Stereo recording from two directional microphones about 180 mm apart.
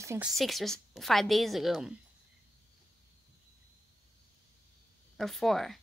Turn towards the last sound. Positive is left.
turn(degrees=0)  # may be behind; listen again after turning